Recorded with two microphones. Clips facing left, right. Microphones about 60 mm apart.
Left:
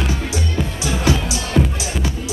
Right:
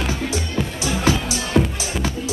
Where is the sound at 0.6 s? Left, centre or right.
Centre.